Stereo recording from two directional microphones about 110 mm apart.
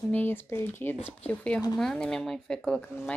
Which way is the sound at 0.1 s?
20° left (ahead or behind).